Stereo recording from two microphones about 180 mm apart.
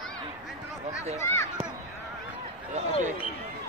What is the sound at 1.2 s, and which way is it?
Speech, 15° left (ahead or behind).